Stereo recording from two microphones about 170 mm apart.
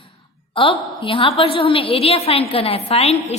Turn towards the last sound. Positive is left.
turn(degrees=40)  # may be behind; listen again after turning